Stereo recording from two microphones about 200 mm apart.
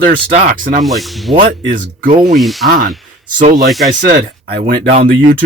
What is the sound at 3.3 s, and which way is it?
Speech, 40° right (ahead or behind).